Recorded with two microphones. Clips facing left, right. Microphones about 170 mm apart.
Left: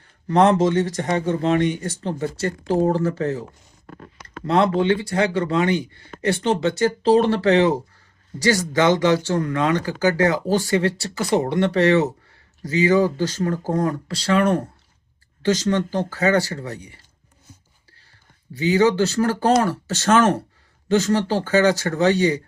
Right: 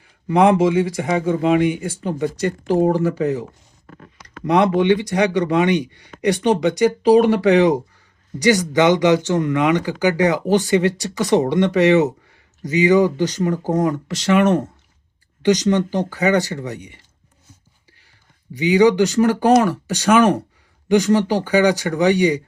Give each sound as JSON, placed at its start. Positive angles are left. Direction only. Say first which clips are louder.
{"t": 0.0, "sound": "speech", "louder": "right 2 dB", "side_deg": -10}
{"t": 4.4, "sound": "speech", "louder": "right 3 dB", "side_deg": -15}
{"t": 18.5, "sound": "speech", "louder": "right 3 dB", "side_deg": -15}